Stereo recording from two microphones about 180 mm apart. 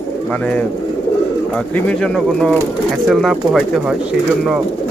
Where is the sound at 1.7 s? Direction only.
5° left (ahead or behind).